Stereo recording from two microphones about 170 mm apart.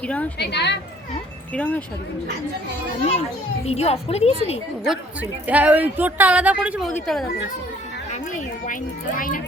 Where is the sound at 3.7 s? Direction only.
40° left (ahead or behind).